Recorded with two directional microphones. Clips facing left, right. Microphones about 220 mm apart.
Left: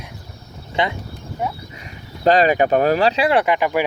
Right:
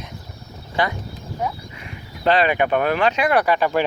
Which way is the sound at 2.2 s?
40° left (ahead or behind).